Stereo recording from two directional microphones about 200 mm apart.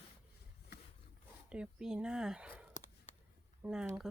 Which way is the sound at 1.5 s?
5° right (ahead or behind).